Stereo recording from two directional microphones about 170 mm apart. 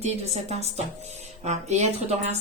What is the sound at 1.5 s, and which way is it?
Speech, 40° right (ahead or behind).